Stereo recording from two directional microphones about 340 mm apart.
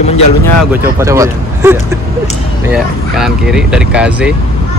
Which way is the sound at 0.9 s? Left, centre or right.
Centre.